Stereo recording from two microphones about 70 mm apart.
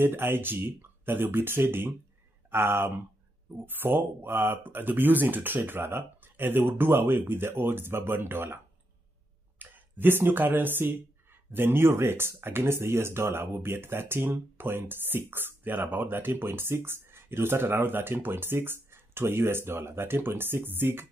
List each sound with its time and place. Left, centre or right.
0.0 s speech: right
9.6 s speech: right